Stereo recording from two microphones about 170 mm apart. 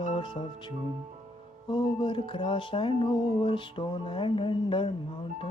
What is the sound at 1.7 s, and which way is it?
Music, 30° left (ahead or behind).